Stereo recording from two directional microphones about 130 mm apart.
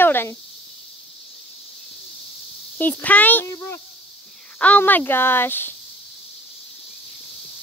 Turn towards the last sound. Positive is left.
turn(degrees=15)  # may be behind; listen again after turning